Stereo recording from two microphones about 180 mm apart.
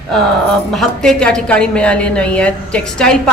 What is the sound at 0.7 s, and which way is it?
A woman's voice, 5° left (ahead or behind).